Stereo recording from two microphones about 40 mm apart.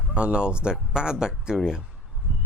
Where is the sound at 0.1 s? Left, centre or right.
Right.